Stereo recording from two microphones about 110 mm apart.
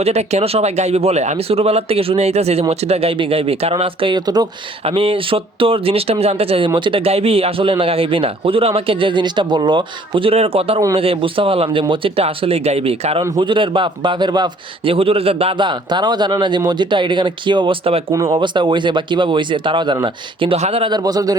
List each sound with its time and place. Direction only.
0.0 s speech: 75° right (ahead or behind); by 4.4 s 40° right (ahead or behind)
4.8 s speech: 60° right (ahead or behind)
6.7 s a man's voice: 45° right (ahead or behind)
10.1 s speech: 60° right (ahead or behind)
13.4 s a man's voice: 50° right (ahead or behind)
14.8 s a man's voice: 60° right (ahead or behind)
20.6 s speech: 65° right (ahead or behind)
20.9 s speech: 35° right (ahead or behind)